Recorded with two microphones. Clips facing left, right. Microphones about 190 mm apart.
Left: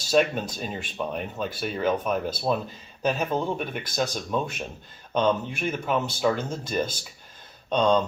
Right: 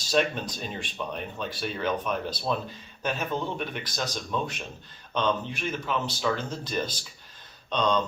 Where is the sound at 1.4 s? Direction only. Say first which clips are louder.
Left 3 dB; 45° left (ahead or behind).